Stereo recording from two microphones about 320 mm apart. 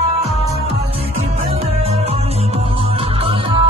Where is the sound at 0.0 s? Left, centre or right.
Centre.